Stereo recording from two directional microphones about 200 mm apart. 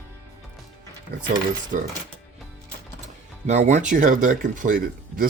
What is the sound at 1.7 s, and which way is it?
Speech, 40° right (ahead or behind).